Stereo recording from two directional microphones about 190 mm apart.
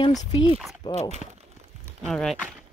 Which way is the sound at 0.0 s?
25° left (ahead or behind).